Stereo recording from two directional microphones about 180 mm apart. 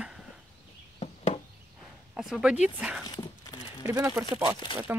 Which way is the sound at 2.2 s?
5° right (ahead or behind).